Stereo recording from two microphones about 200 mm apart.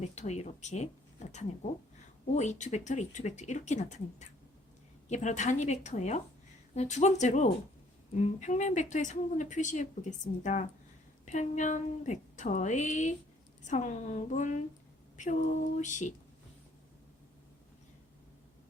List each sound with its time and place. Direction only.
0.0 s speech: 35° left (ahead or behind)
2.3 s speech: 35° left (ahead or behind)